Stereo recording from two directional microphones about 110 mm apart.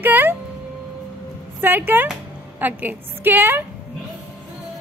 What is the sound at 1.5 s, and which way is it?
A woman's voice, 15° right (ahead or behind).